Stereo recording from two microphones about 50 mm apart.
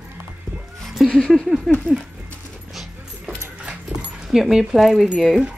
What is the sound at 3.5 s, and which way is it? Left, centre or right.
Dog, right.